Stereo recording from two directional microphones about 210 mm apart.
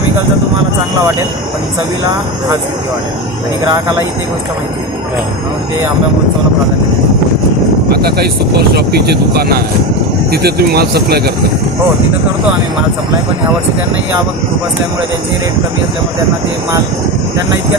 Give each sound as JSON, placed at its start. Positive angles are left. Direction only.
{"t": 7.9, "sound": "speech", "side_deg": -50}